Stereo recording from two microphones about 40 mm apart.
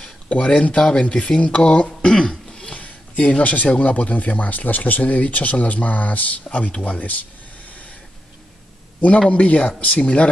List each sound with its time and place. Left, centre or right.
0.3 s speech: left
0.7 s speech: centre
2.1 s throat clearing: centre
2.7 s speech: left
7.6 s a sound: left
9.3 s speech: left